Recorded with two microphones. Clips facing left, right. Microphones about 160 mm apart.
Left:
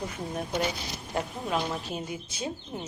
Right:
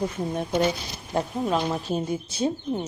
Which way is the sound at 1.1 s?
35° right (ahead or behind).